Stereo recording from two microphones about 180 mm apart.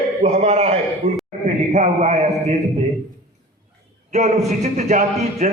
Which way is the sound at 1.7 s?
40° right (ahead or behind).